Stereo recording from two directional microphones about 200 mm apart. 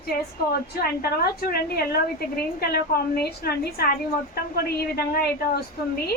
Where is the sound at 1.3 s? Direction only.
50° left (ahead or behind).